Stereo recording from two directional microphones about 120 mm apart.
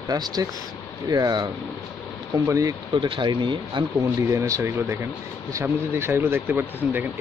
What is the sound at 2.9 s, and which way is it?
Speech, 45° right (ahead or behind).